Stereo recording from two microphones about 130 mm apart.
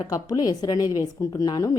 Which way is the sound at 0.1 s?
30° left (ahead or behind).